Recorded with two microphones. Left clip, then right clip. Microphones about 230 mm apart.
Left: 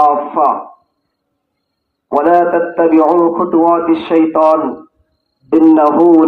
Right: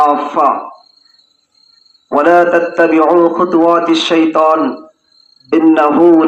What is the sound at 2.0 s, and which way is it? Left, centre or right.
A man's voice, left.